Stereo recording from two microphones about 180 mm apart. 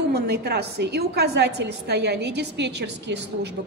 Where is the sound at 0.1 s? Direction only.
60° right (ahead or behind).